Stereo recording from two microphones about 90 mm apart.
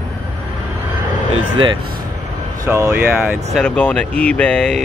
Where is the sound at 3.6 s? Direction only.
10° left (ahead or behind).